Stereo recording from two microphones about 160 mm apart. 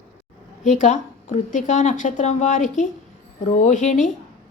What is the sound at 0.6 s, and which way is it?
A woman's voice, 50° left (ahead or behind).